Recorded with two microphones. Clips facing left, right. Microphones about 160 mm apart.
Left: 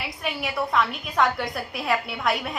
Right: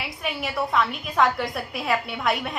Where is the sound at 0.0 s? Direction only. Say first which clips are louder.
Even; centre (ahead or behind).